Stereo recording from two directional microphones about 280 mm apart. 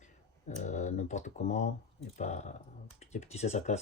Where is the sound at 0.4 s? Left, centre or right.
Left.